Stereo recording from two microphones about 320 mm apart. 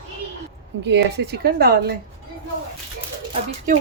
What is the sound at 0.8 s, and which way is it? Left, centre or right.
Speech, right.